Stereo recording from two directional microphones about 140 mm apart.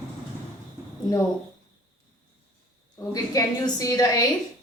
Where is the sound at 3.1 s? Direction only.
25° left (ahead or behind).